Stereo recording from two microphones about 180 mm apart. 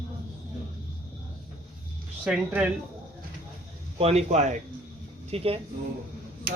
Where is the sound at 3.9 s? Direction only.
35° right (ahead or behind).